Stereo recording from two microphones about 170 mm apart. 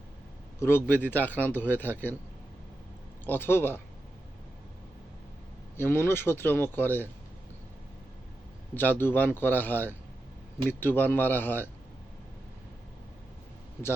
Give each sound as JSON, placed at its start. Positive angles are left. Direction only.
{"t": 0.6, "sound": "a man's voice", "side_deg": 15}
{"t": 3.2, "sound": "a man's voice", "side_deg": 10}
{"t": 5.7, "sound": "a man's voice", "side_deg": 15}
{"t": 8.7, "sound": "a man's voice", "side_deg": 10}